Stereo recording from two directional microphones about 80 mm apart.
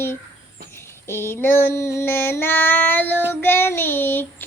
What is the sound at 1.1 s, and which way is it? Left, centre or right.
Child singing, left.